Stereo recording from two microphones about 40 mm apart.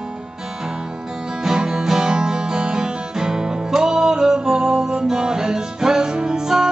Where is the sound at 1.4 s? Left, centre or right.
Centre.